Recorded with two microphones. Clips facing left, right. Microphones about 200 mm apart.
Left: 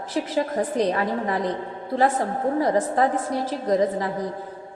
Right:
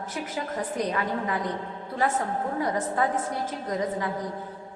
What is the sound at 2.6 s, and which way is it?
A woman's voice, 35° left (ahead or behind).